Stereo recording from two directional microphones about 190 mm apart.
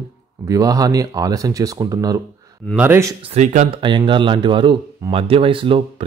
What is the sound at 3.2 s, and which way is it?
Speech, 40° right (ahead or behind).